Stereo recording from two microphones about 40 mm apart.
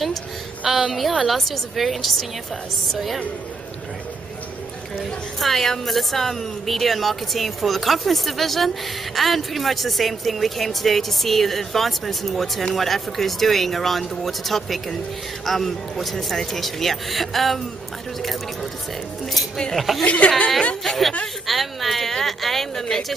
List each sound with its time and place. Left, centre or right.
0.7 s a woman's voice: centre
1.2 s a woman's voice: centre
5.4 s a woman's voice: centre
19.7 s a woman's voice: centre
20.2 s a woman's voice: centre
20.8 s a woman's voice: centre